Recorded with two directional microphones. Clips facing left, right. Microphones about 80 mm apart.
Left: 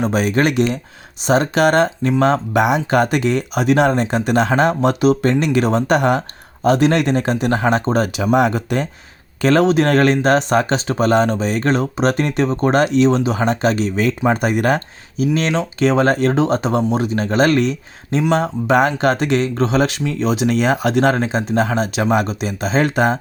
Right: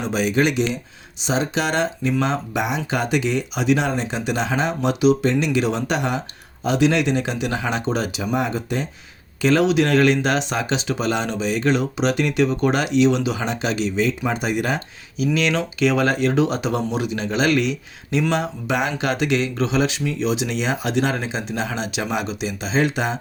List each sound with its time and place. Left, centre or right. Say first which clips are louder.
0.0 s speech: left 3 dB; left
8.2 s speech: left 7 dB; left
9.4 s speech: left 3 dB; left
15.4 s speech: even; left